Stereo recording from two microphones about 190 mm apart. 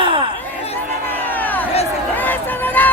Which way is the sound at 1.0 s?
10° left (ahead or behind).